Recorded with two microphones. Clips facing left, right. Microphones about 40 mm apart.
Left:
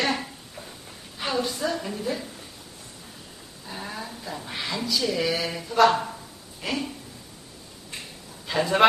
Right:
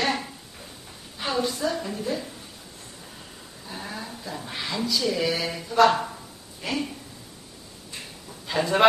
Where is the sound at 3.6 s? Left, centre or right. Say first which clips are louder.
Left 1 dB; centre.